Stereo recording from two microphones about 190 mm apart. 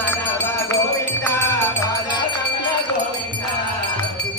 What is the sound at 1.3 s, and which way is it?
Music, 15° left (ahead or behind).